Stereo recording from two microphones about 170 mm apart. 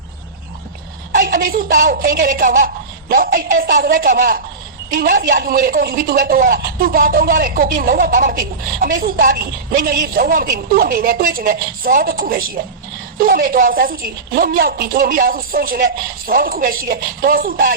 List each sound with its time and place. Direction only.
1.1 s a woman's voice: 55° right (ahead or behind)